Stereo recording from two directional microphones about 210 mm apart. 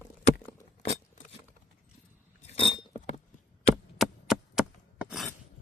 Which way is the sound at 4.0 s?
Centre (ahead or behind).